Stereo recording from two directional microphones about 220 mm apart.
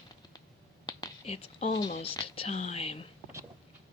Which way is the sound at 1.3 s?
25° left (ahead or behind).